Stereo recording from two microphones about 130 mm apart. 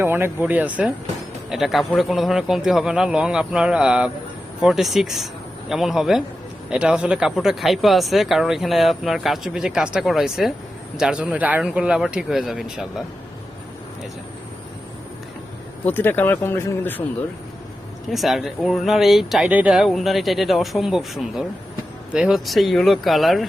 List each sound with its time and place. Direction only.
0.0 s a man's voice: 15° right (ahead or behind)
15.9 s speech: 15° left (ahead or behind)
18.1 s speech: centre (ahead or behind)